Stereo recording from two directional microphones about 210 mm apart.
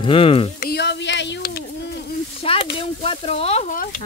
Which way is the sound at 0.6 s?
50° left (ahead or behind).